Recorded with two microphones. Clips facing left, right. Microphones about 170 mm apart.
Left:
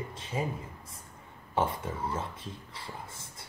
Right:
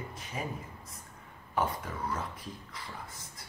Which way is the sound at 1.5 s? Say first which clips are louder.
Left 2 dB; 25° left (ahead or behind).